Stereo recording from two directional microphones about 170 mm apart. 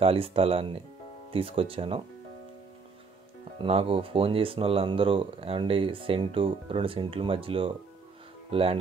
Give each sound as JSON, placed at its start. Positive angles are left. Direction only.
{"t": 0.0, "sound": "speech", "side_deg": -35}
{"t": 3.5, "sound": "speech", "side_deg": -35}